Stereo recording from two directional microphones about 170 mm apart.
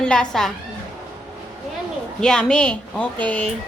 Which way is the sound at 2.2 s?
5° left (ahead or behind).